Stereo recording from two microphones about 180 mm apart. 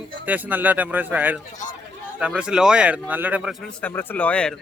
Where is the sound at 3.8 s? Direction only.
10° left (ahead or behind).